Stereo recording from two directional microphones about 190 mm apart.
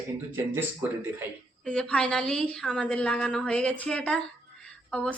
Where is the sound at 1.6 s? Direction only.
5° left (ahead or behind).